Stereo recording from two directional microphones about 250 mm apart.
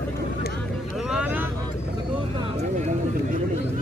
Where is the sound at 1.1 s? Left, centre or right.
Centre.